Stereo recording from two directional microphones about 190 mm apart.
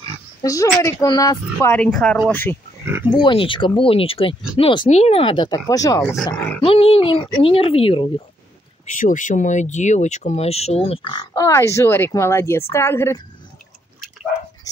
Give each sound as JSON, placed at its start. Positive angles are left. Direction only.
{"t": 0.4, "sound": "a woman's voice", "side_deg": 20}
{"t": 2.8, "sound": "speech", "side_deg": -10}
{"t": 3.1, "sound": "a woman's voice", "side_deg": 25}
{"t": 6.6, "sound": "speech", "side_deg": 30}
{"t": 8.9, "sound": "a woman's voice", "side_deg": 40}